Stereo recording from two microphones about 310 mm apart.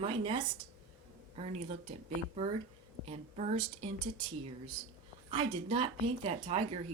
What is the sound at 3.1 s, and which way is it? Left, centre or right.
Speech, right.